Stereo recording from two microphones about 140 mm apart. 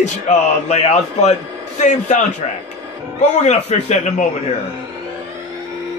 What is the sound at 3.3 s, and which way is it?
A man's voice, 55° left (ahead or behind).